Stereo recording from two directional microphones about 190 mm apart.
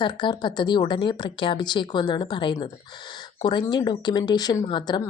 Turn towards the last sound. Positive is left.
turn(degrees=25)  # may be behind; listen again after turning